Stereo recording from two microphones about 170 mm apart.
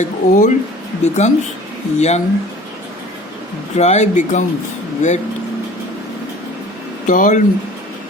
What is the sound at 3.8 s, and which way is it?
Speech, 40° left (ahead or behind).